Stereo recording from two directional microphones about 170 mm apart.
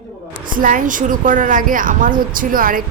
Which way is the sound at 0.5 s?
50° right (ahead or behind).